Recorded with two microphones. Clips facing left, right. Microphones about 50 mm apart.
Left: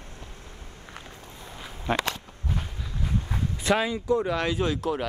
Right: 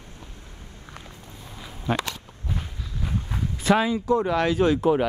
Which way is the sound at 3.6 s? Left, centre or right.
Centre.